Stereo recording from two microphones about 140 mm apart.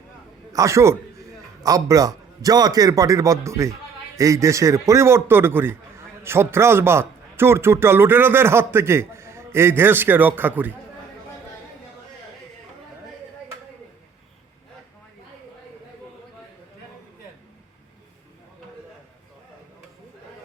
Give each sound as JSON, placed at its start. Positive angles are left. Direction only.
{"t": 0.5, "sound": "a man's voice", "side_deg": -20}